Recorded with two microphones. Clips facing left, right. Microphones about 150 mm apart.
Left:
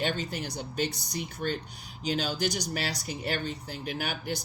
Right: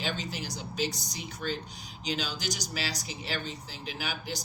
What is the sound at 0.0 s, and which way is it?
Speech, 55° left (ahead or behind).